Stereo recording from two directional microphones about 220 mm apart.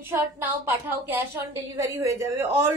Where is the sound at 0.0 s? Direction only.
10° right (ahead or behind).